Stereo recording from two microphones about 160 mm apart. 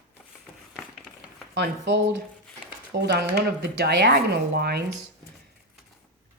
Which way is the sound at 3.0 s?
90° right.